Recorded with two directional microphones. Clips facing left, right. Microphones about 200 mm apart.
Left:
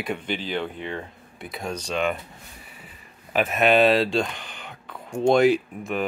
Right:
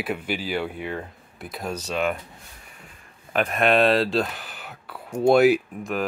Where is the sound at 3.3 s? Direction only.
Centre (ahead or behind).